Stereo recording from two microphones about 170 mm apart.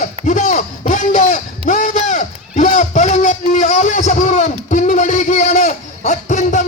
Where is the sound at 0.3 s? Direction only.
45° left (ahead or behind).